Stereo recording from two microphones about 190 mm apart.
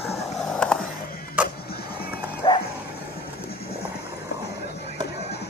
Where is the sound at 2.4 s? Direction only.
25° left (ahead or behind).